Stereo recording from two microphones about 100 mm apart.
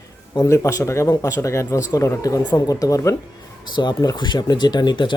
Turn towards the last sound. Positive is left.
turn(degrees=50)  # may be behind; listen again after turning